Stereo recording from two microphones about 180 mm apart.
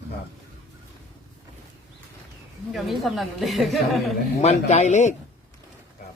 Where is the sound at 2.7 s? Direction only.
Centre (ahead or behind).